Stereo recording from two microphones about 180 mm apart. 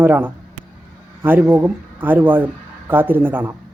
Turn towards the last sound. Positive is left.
turn(degrees=-10)  # may be behind; listen again after turning